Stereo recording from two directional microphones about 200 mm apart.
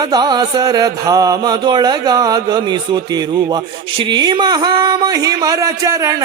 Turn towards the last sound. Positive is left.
turn(degrees=-15)  # may be behind; listen again after turning